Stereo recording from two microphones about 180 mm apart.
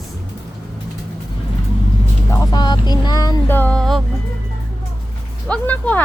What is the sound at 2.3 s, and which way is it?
Speech, 25° left (ahead or behind).